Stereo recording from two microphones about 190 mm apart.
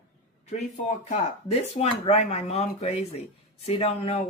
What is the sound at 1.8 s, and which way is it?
Speech, 30° left (ahead or behind).